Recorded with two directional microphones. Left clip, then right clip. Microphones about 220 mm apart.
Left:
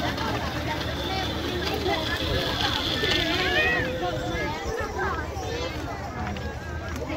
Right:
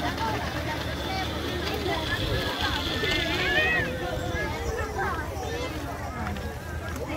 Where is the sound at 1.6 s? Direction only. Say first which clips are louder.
Left 3 dB; 45° left (ahead or behind).